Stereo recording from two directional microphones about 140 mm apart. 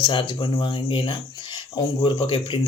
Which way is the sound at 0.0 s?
35° left (ahead or behind).